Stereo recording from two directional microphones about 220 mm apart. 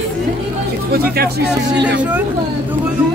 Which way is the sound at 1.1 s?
45° right (ahead or behind).